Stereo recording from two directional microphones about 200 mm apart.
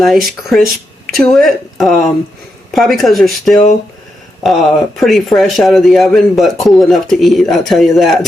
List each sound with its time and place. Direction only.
0.0 s speech: centre (ahead or behind)